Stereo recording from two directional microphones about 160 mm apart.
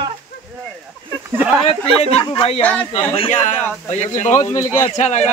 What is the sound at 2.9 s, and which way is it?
Speech, 35° left (ahead or behind).